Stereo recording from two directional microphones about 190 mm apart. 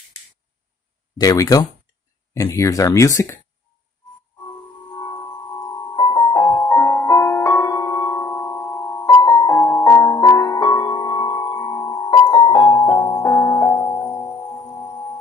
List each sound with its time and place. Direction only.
1.2 s speech: 20° left (ahead or behind)
5.9 s music: 25° left (ahead or behind)